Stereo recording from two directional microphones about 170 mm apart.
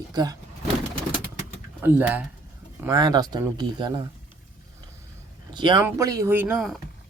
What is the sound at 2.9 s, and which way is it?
Speech, 25° right (ahead or behind).